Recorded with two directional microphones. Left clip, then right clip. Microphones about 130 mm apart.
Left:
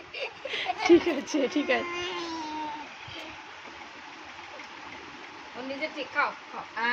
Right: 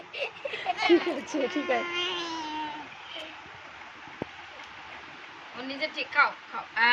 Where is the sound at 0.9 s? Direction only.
30° left (ahead or behind).